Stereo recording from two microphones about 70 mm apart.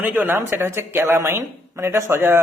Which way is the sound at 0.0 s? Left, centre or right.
Right.